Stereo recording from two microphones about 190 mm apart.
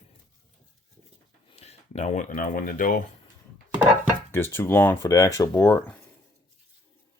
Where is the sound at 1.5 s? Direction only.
35° left (ahead or behind).